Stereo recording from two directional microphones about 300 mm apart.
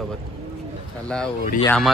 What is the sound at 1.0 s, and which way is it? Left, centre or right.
Speech, centre.